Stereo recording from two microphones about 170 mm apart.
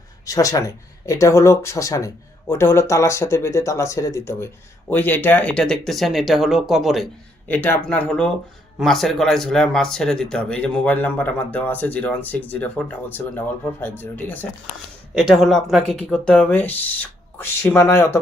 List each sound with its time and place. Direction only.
0.3 s speech: 20° left (ahead or behind); by 7.1 s centre (ahead or behind)
7.4 s speech: 10° left (ahead or behind)
15.1 s speech: centre (ahead or behind); by 18.2 s 15° left (ahead or behind)